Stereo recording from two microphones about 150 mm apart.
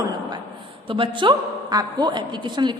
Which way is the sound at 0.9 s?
35° right (ahead or behind).